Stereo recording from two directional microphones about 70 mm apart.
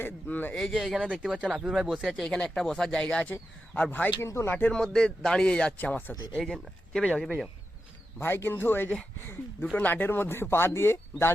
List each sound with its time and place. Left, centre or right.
0.0 s a man's voice: left
0.5 s speech: centre
1.1 s speech: centre
1.7 s a man's voice: centre; by 3.9 s left
4.2 s speech: left
4.7 s speech: centre
5.7 s a man's voice: left
6.4 s speech: centre
8.2 s speech: left